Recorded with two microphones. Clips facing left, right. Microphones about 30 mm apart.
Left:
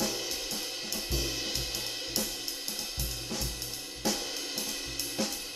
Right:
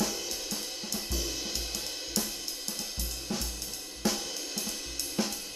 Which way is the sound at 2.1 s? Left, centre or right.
Centre.